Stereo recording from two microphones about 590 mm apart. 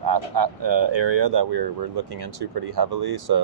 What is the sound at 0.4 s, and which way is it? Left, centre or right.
Speech, right.